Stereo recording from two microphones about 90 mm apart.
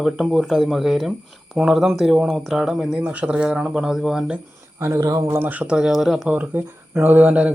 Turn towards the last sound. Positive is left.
turn(degrees=-15)  # may be behind; listen again after turning